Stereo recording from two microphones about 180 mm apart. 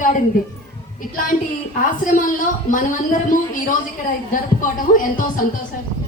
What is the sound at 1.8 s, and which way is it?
Speech, 50° left (ahead or behind).